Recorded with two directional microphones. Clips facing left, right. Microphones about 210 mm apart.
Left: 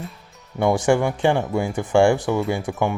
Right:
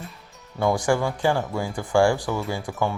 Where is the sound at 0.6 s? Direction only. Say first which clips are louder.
Left 4 dB; 25° left (ahead or behind).